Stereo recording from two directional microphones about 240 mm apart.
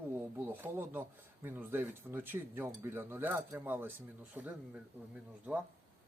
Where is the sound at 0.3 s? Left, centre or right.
Centre.